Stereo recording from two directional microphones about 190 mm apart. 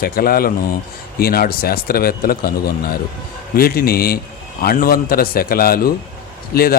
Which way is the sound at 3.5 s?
55° left (ahead or behind).